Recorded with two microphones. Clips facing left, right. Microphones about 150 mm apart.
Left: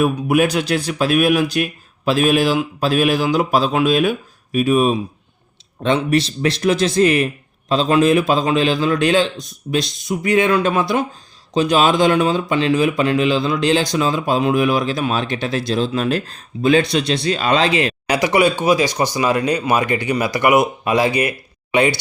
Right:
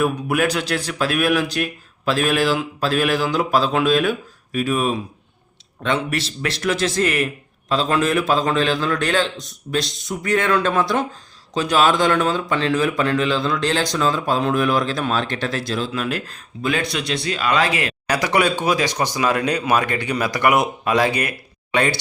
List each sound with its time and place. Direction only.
0.0 s a man's voice: 20° left (ahead or behind)
18.1 s speech: 10° left (ahead or behind)